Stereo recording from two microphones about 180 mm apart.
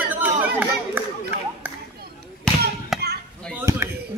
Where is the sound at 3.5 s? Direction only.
15° right (ahead or behind).